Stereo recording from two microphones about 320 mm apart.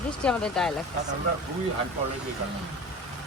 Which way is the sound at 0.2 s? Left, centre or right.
Centre.